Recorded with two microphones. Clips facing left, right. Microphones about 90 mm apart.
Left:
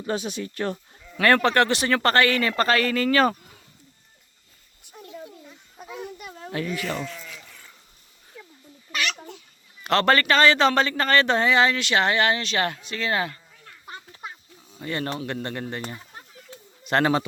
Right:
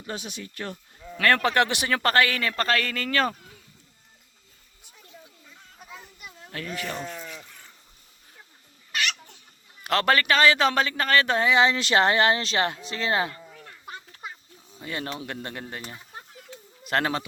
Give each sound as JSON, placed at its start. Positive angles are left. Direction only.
{"t": 0.0, "sound": "speech", "side_deg": 40}
{"t": 1.4, "sound": "speech", "side_deg": -10}
{"t": 4.9, "sound": "a sound", "side_deg": 65}
{"t": 6.5, "sound": "speech", "side_deg": 5}
{"t": 7.0, "sound": "bleat", "side_deg": -40}
{"t": 9.8, "sound": "speech", "side_deg": -5}
{"t": 11.8, "sound": "speech", "side_deg": -35}
{"t": 14.8, "sound": "speech", "side_deg": -5}
{"t": 16.8, "sound": "speech", "side_deg": 0}